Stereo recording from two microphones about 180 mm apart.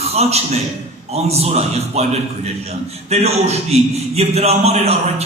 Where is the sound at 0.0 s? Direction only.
35° right (ahead or behind).